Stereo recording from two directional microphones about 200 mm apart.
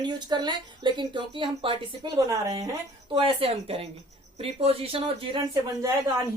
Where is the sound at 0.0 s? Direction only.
20° right (ahead or behind).